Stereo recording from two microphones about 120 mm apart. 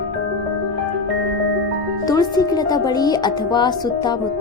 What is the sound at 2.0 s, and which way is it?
Speech, 30° left (ahead or behind).